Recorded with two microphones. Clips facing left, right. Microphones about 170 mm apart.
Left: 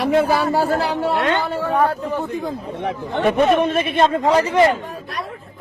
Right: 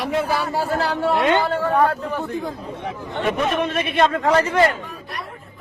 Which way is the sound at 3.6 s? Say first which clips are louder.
Left 2 dB; 30° left (ahead or behind).